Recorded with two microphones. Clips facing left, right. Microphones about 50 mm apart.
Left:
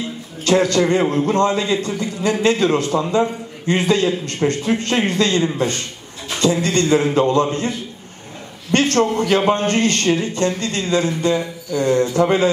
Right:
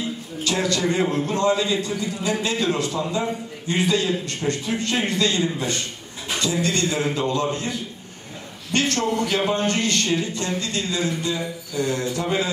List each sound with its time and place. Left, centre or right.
0.4 s a man's voice: left
8.7 s a man's voice: left